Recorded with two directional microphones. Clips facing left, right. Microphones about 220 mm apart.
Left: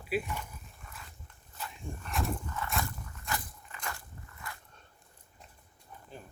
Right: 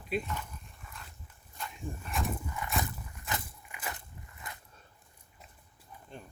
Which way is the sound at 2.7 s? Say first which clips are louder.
Right 1 dB; 20° right (ahead or behind).